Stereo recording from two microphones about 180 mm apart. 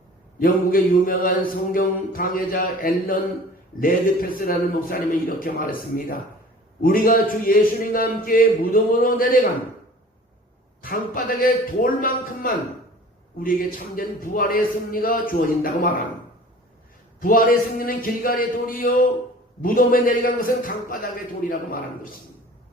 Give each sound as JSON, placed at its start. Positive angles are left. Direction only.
{"t": 0.3, "sound": "speech", "side_deg": 50}
{"t": 6.8, "sound": "speech", "side_deg": 50}
{"t": 10.8, "sound": "speech", "side_deg": 50}
{"t": 17.2, "sound": "speech", "side_deg": 50}